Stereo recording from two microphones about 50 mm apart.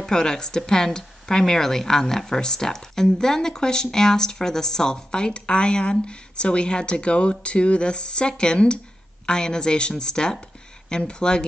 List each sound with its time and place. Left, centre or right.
0.0 s speech: centre